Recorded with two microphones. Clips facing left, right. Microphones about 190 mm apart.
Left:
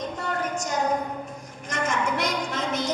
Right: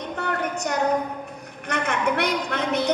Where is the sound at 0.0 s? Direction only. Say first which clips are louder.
Right 2 dB; 65° right (ahead or behind).